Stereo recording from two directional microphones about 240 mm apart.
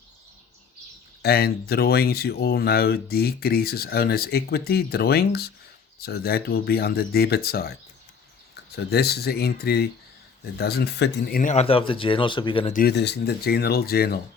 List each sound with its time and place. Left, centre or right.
1.2 s speech: left
12.7 s speech: left